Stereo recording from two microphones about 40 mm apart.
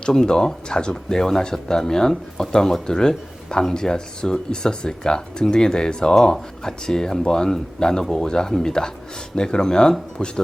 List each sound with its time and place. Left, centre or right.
0.0 s speech: centre